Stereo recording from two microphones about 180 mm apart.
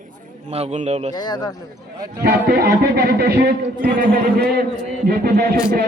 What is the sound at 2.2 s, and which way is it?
Speech, 60° right (ahead or behind).